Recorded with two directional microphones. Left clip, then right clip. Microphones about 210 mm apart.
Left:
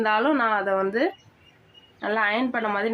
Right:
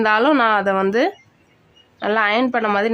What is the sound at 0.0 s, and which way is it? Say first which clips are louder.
A woman's voice: right 6 dB; 35° right (ahead or behind).